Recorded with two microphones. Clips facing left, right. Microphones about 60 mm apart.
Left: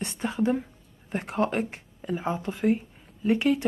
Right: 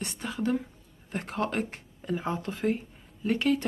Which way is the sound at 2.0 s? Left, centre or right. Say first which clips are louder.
Left 2 dB; centre.